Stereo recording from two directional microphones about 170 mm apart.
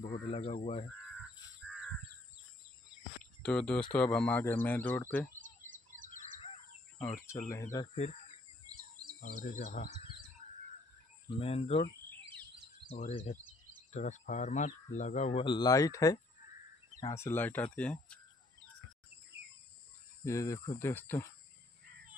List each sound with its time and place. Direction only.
0.0 s speech: 40° left (ahead or behind)
3.4 s speech: 5° left (ahead or behind)
7.4 s speech: 20° left (ahead or behind)
7.9 s speech: 40° left (ahead or behind)
8.7 s a sound: 20° right (ahead or behind)
9.2 s speech: 50° left (ahead or behind)
10.4 s a sound: 45° left (ahead or behind)
11.2 s speech: 35° left (ahead or behind)
12.9 s speech: 40° left (ahead or behind)
15.4 s speech: 25° left (ahead or behind); by 18.2 s 5° left (ahead or behind)
20.2 s speech: 20° left (ahead or behind)